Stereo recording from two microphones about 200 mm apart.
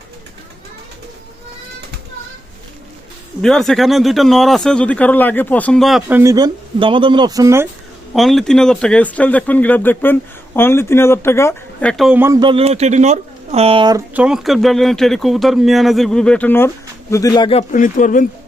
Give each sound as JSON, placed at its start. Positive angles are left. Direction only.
{"t": 3.4, "sound": "speech", "side_deg": 5}
{"t": 8.1, "sound": "speech", "side_deg": 0}
{"t": 12.4, "sound": "speech", "side_deg": -25}
{"t": 14.1, "sound": "speech", "side_deg": -5}
{"t": 17.6, "sound": "speech", "side_deg": 40}